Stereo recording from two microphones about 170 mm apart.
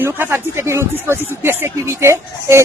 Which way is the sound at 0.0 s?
10° right (ahead or behind).